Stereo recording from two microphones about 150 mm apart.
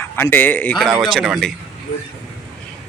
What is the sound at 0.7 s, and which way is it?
Speech, centre (ahead or behind).